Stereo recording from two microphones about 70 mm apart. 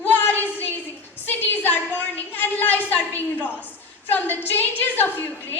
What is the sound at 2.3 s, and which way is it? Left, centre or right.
A woman's voice, left.